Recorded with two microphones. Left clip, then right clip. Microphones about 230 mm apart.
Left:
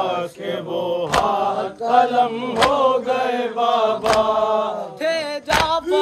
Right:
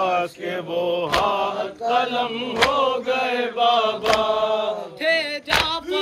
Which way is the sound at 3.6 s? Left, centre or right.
Left.